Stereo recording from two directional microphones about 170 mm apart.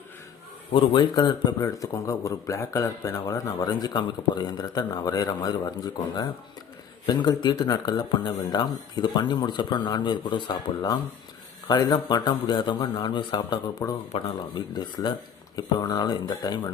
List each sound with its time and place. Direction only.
0.7 s speech: 30° left (ahead or behind)